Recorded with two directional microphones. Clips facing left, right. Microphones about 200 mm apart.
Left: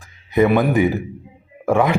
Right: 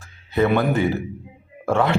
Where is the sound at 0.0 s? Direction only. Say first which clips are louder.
Left 4 dB; 15° left (ahead or behind).